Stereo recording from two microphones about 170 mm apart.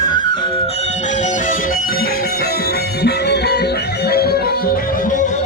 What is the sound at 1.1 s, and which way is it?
Music, 45° left (ahead or behind).